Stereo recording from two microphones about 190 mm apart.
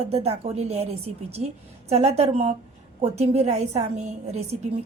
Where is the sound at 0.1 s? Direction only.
35° right (ahead or behind).